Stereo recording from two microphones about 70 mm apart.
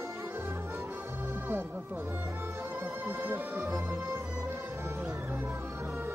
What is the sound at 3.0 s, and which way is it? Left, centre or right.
Music, right.